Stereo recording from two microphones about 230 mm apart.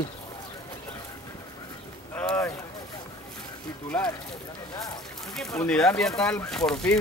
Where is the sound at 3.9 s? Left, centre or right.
Centre.